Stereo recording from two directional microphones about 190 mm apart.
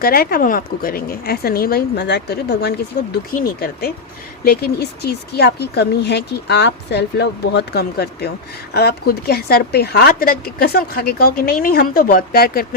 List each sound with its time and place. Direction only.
0.0 s speech: 50° left (ahead or behind)